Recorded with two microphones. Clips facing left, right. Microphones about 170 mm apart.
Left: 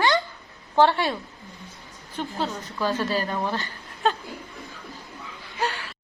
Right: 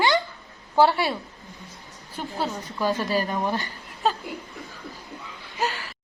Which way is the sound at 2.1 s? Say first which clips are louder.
Even; 10° right (ahead or behind).